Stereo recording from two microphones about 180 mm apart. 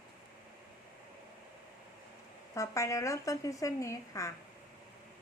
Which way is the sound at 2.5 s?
15° left (ahead or behind).